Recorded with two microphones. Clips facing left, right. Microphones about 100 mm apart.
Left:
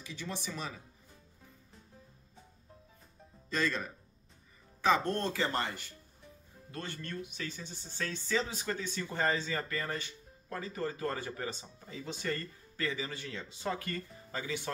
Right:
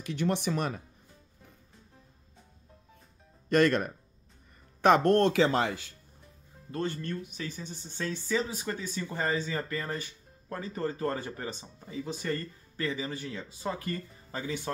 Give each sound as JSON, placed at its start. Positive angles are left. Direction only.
{"t": 0.0, "sound": "speech", "side_deg": -60}
{"t": 3.4, "sound": "speech", "side_deg": -65}
{"t": 6.7, "sound": "speech", "side_deg": -30}
{"t": 8.0, "sound": "speech", "side_deg": -15}
{"t": 13.3, "sound": "speech", "side_deg": -5}
{"t": 13.8, "sound": "speech", "side_deg": -25}